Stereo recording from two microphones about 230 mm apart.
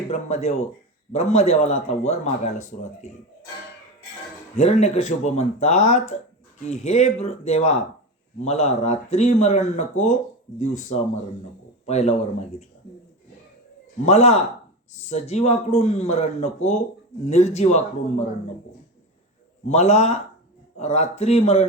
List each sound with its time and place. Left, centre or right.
0.1 s a man's voice: left
4.5 s a man's voice: left
14.0 s a man's voice: left
19.6 s a man's voice: left